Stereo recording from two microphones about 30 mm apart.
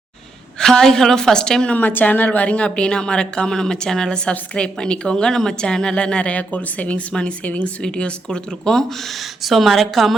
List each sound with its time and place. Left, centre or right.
0.6 s a woman's voice: centre
1.7 s a woman's voice: left
2.5 s a woman's voice: left; by 4.2 s centre
4.3 s a woman's voice: left
5.9 s a woman's voice: left
6.3 s speech: left
7.1 s a woman's voice: left
8.7 s speech: centre